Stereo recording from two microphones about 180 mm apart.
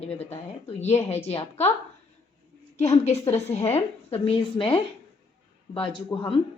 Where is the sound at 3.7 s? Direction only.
30° left (ahead or behind).